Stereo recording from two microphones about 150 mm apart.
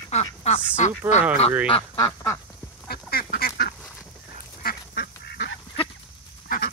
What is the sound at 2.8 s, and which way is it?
Duck, 90° left.